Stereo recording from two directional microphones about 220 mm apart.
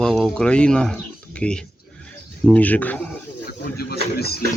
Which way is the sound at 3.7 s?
45° left (ahead or behind).